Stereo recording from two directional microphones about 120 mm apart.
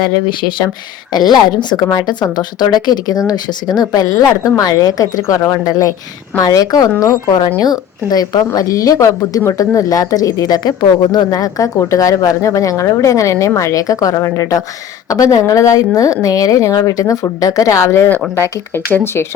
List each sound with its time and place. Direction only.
1.1 s a woman's voice: 35° left (ahead or behind)